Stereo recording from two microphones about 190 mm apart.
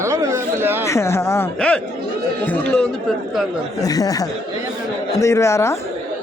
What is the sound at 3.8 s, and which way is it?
A man's voice, 20° left (ahead or behind).